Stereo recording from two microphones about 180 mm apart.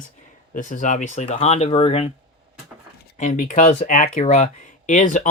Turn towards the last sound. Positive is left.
turn(degrees=45)  # may be behind; listen again after turning